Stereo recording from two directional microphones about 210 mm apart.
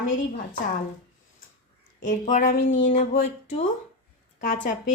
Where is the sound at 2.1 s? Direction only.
35° left (ahead or behind).